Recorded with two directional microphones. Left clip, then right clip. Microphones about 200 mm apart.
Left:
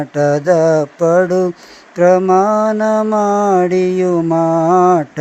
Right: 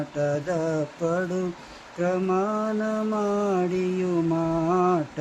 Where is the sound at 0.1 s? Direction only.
35° left (ahead or behind).